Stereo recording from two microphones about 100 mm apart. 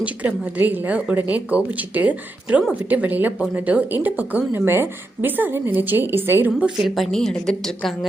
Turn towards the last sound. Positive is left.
turn(degrees=5)  # may be behind; listen again after turning